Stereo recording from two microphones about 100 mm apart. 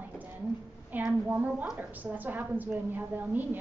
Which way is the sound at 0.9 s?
15° right (ahead or behind).